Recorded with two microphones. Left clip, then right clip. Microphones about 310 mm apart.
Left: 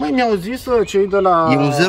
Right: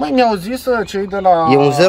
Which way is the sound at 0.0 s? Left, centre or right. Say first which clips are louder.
Right 3 dB; right.